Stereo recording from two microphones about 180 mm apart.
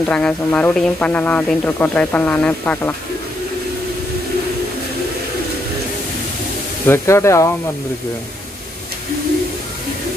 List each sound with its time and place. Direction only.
0.0 s speech: 5° left (ahead or behind)
6.9 s speech: 15° left (ahead or behind)